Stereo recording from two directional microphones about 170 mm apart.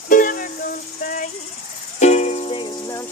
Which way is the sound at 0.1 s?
55° left (ahead or behind).